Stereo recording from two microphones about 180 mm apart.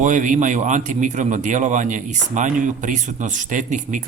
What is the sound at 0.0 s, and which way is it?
A man's voice, 45° right (ahead or behind).